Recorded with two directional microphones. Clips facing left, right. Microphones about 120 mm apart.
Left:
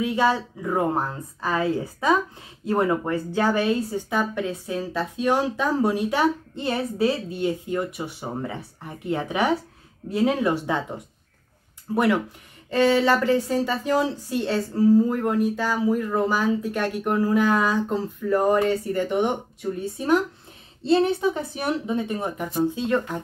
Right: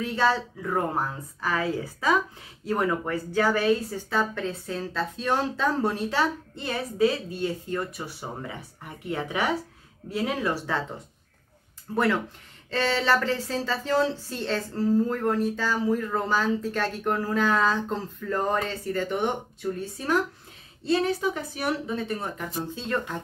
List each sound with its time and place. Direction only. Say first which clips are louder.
0.0 s speech: left 3 dB; 15° left (ahead or behind)
11.9 s speech: left 3 dB; 15° left (ahead or behind)